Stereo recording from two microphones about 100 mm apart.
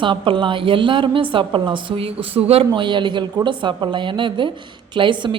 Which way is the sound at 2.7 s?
50° right (ahead or behind).